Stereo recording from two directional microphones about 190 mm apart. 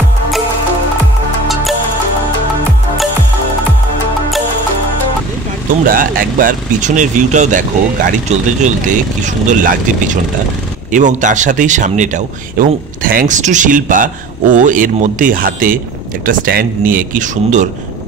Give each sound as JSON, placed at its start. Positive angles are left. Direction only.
{"t": 5.9, "sound": "speech", "side_deg": -45}
{"t": 10.9, "sound": "speech", "side_deg": -40}